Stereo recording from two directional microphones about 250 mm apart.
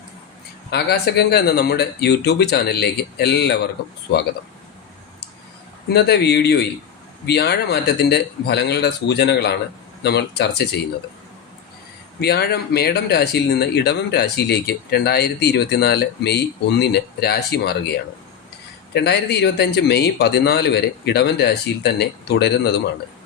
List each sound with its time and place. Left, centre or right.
0.7 s speech: left
5.9 s speech: left
12.2 s speech: left
18.9 s speech: left